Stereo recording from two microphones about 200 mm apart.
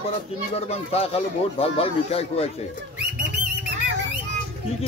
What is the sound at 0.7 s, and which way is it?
Speech, 30° left (ahead or behind).